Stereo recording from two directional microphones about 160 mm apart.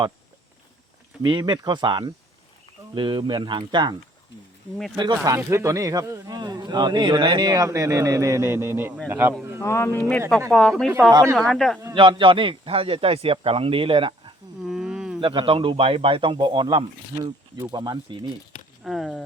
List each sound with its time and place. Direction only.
1.3 s speech: 25° right (ahead or behind)
5.2 s speech: 20° right (ahead or behind)
9.6 s speech: 15° left (ahead or behind); by 10.9 s centre (ahead or behind)
11.1 s speech: 20° right (ahead or behind)
11.3 s speech: 5° left (ahead or behind)
11.9 s a man's voice: 30° right (ahead or behind)
14.6 s a sound: 5° right (ahead or behind)
15.2 s a man's voice: 30° right (ahead or behind)
18.8 s speech: centre (ahead or behind)